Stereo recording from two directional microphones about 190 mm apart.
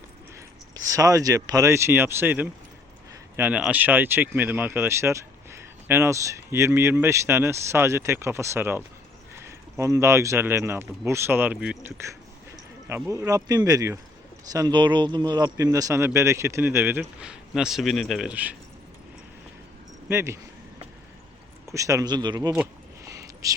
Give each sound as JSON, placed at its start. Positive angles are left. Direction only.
{"t": 0.7, "sound": "speech", "side_deg": -15}
{"t": 20.1, "sound": "speech", "side_deg": -15}
{"t": 21.7, "sound": "speech", "side_deg": -15}